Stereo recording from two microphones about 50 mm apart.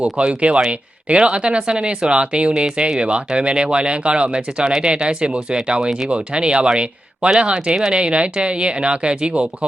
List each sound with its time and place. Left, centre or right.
0.0 s speech: right